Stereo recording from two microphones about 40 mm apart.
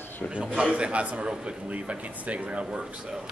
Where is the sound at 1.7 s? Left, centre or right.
Right.